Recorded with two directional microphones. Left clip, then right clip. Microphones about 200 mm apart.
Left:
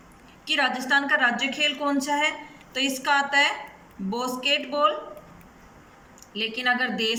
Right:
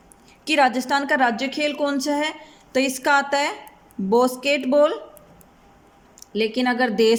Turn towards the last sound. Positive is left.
turn(degrees=-60)  # may be behind; listen again after turning